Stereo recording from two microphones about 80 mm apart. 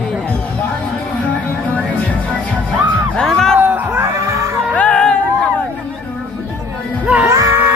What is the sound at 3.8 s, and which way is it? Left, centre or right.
Music, right.